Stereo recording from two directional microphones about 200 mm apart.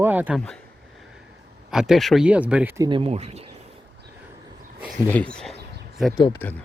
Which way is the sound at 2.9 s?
25° right (ahead or behind).